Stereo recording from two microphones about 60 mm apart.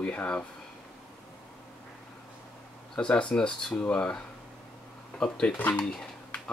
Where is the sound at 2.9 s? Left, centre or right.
Centre.